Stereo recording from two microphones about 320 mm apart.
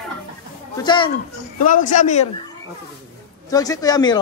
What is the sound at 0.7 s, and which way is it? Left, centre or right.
A man's voice, centre.